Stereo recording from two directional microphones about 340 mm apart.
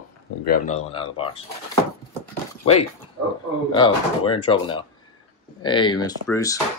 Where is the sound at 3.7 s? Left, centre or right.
Centre.